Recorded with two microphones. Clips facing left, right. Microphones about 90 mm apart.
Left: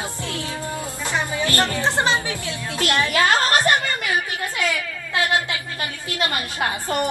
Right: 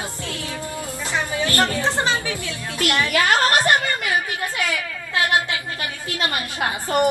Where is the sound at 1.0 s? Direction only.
20° left (ahead or behind).